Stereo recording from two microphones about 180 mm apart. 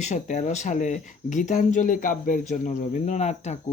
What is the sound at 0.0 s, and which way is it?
Speech, 40° left (ahead or behind).